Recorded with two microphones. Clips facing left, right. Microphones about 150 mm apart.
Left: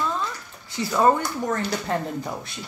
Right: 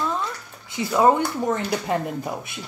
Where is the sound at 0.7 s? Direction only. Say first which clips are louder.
Right 2 dB; 10° right (ahead or behind).